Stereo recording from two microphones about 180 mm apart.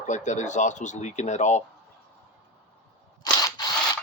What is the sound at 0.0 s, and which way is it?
Speech, 40° left (ahead or behind).